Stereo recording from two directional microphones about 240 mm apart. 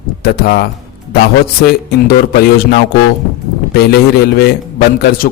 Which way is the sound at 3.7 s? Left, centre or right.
Left.